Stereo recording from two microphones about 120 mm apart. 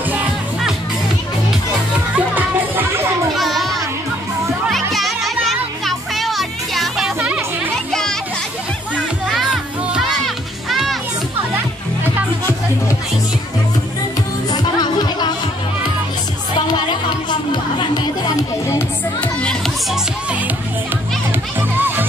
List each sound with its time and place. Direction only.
2.1 s music: 15° right (ahead or behind)
3.3 s music: centre (ahead or behind)
4.9 s music: centre (ahead or behind)
7.9 s music: 5° left (ahead or behind)
14.5 s music: 35° left (ahead or behind)
16.5 s music: 35° left (ahead or behind)
19.2 s children playing: 5° left (ahead or behind)
21.5 s music: 20° right (ahead or behind)